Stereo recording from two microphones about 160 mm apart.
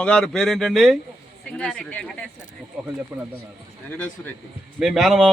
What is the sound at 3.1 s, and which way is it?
Speech, 15° right (ahead or behind).